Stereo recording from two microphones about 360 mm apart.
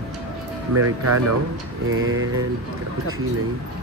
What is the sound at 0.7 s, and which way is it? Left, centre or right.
Speech, right.